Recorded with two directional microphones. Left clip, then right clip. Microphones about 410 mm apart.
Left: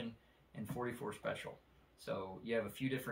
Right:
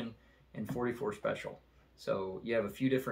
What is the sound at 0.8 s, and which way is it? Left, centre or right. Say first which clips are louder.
Speech: right 7 dB; centre.